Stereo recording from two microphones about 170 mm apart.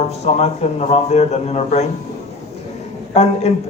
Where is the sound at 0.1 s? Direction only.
40° left (ahead or behind).